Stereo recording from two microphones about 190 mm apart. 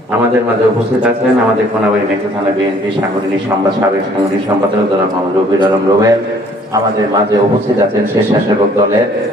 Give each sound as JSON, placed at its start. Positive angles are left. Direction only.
{"t": 5.6, "sound": "a man's voice", "side_deg": -15}